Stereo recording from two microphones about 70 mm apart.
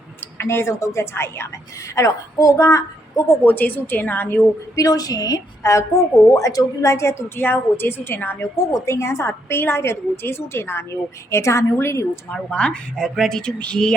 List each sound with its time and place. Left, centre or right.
0.3 s a woman's voice: left
2.0 s a woman's voice: left
3.4 s a woman's voice: left
4.7 s a woman's voice: left
8.5 s a woman's voice: left
12.3 s speech: centre